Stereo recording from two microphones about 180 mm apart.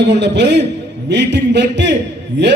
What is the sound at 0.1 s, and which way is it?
A man's voice, 75° right (ahead or behind).